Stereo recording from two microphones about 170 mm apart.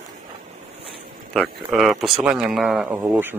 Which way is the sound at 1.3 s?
Centre (ahead or behind).